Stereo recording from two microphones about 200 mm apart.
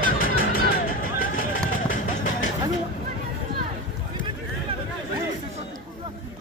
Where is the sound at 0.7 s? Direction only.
45° left (ahead or behind).